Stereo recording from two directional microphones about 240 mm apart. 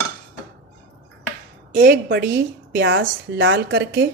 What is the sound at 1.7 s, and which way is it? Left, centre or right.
A woman's voice, right.